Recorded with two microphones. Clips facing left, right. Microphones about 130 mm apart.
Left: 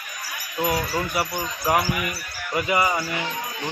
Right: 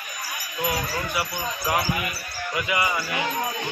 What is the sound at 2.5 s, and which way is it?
Speech, 40° left (ahead or behind).